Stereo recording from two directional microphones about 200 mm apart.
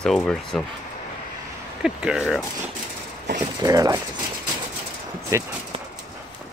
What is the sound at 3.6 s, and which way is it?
Speech, 20° right (ahead or behind).